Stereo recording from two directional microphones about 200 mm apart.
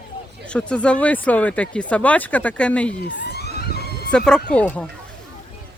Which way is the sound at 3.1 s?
60° left (ahead or behind).